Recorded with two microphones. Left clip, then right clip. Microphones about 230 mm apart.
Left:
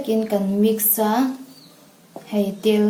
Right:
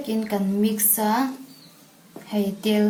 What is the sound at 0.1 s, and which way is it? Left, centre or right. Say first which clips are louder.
Speech: left 5 dB; centre.